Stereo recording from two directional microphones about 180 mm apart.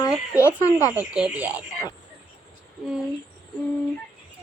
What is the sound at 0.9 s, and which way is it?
Speech, 5° right (ahead or behind).